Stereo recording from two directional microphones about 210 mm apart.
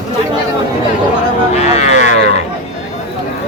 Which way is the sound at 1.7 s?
35° left (ahead or behind).